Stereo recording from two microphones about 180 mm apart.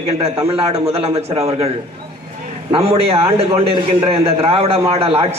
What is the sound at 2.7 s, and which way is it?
A man's voice, 35° right (ahead or behind).